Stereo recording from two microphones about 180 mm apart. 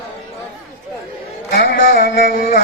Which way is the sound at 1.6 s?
50° left (ahead or behind).